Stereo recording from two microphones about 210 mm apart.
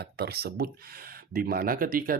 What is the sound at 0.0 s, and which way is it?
Speech, 50° right (ahead or behind).